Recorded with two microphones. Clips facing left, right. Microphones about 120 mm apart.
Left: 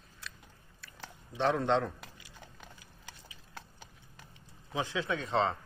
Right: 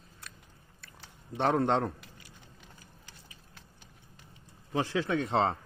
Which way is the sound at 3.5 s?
80° left.